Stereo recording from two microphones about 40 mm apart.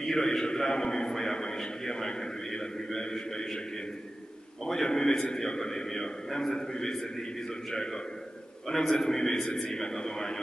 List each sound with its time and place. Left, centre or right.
0.0 s a man's voice: centre
4.8 s a man's voice: centre
8.6 s a man's voice: centre